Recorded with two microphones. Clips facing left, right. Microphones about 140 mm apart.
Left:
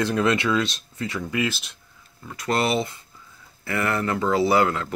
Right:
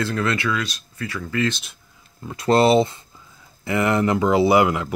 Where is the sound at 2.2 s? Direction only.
25° right (ahead or behind).